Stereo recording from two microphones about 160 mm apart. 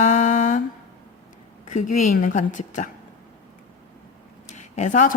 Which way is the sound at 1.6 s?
50° left (ahead or behind).